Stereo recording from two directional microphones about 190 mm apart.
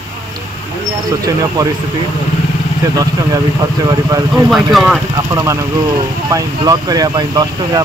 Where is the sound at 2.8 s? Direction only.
20° right (ahead or behind).